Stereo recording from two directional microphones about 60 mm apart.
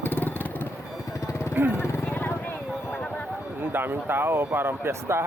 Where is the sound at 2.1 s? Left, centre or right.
Left.